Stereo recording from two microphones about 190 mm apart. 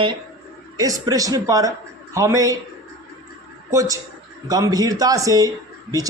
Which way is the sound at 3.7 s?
15° right (ahead or behind).